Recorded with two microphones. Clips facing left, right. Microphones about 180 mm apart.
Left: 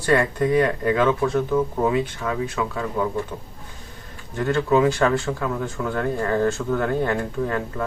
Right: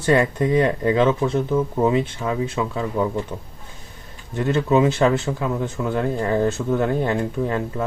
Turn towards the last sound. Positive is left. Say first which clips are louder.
# right 2 dB
turn(degrees=-25)  # may be behind; listen again after turning